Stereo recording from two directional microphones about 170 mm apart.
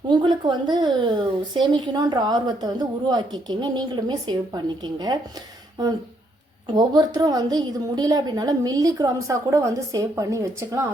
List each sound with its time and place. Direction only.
0.1 s a woman's voice: 25° right (ahead or behind)
6.7 s a woman's voice: 25° right (ahead or behind)